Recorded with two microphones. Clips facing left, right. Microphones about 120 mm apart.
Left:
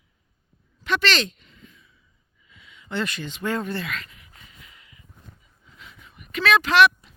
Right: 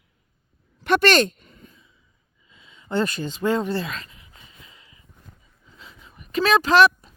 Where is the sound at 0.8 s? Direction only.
55° right (ahead or behind).